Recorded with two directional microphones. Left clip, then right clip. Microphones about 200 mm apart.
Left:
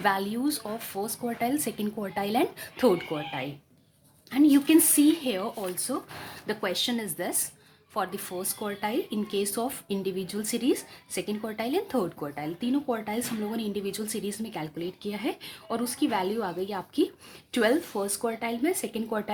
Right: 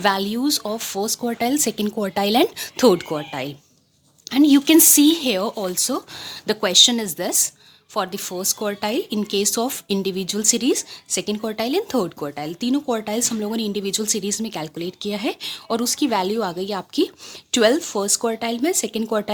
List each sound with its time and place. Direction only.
0.0 s speech: 40° right (ahead or behind)